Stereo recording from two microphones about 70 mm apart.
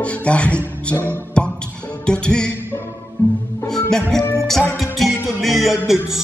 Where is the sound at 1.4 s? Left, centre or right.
Centre.